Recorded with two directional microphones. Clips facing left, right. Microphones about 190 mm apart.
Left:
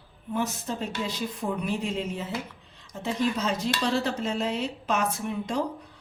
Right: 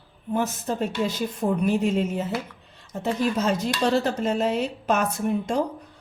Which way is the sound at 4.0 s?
50° right (ahead or behind).